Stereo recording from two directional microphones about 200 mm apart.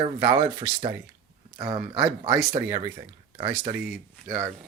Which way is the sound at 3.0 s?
30° right (ahead or behind).